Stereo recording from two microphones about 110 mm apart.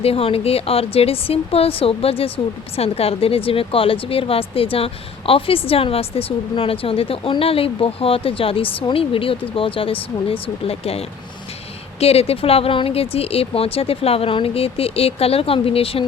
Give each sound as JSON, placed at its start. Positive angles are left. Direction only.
{"t": 0.0, "sound": "a woman's voice", "side_deg": 60}